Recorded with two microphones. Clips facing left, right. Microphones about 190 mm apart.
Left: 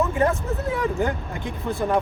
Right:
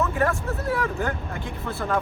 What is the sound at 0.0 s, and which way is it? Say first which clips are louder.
Speech: left 2 dB; 20° left (ahead or behind).